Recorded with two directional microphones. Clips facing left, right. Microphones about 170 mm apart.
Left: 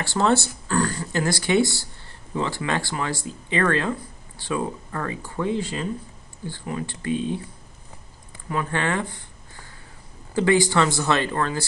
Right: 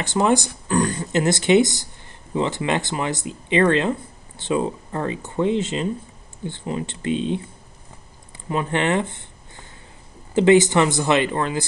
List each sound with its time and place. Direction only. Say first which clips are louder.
0.0 s speech: right 2 dB; 15° right (ahead or behind)
8.5 s speech: right 4 dB; 20° right (ahead or behind)